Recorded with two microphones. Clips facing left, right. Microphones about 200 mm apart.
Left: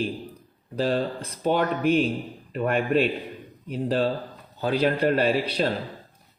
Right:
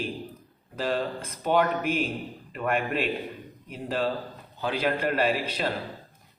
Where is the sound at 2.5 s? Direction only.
35° left (ahead or behind).